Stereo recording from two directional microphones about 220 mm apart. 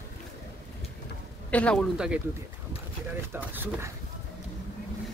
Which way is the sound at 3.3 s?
10° right (ahead or behind).